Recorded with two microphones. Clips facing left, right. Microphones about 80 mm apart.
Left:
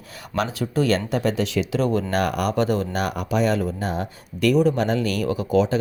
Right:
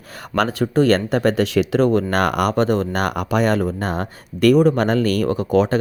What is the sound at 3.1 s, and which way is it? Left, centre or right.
Speech, right.